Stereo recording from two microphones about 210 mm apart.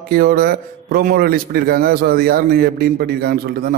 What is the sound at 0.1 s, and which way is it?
A man's voice, 45° right (ahead or behind).